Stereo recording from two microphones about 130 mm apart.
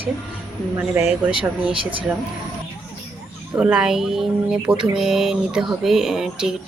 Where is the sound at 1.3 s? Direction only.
45° right (ahead or behind).